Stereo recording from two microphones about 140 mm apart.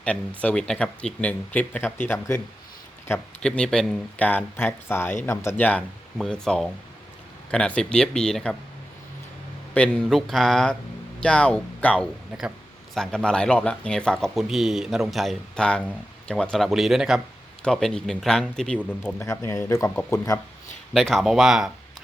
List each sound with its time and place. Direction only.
0.0 s speech: 10° left (ahead or behind)
3.4 s speech: 5° left (ahead or behind)
9.7 s speech: 5° left (ahead or behind)
19.2 s speech: 20° left (ahead or behind)
20.9 s speech: centre (ahead or behind)